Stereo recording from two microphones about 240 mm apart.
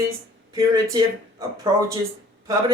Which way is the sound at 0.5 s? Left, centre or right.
Centre.